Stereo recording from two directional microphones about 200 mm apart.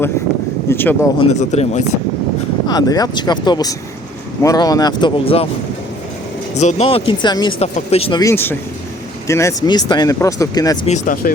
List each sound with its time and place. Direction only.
0.7 s speech: 10° left (ahead or behind)
1.2 s speech: 35° left (ahead or behind)
2.6 s speech: 20° left (ahead or behind)
6.6 s speech: 35° left (ahead or behind)
8.2 s speech: 15° left (ahead or behind)
10.8 s speech: 40° left (ahead or behind)